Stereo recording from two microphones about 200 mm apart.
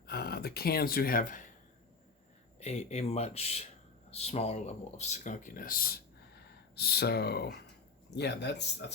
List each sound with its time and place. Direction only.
0.1 s speech: 50° left (ahead or behind)
2.6 s speech: 35° left (ahead or behind); by 8.9 s 60° left (ahead or behind)